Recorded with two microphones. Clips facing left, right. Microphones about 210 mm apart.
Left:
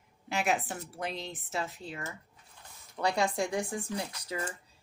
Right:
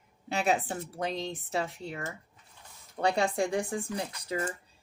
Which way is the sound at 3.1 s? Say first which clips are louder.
Right 2 dB; 30° right (ahead or behind).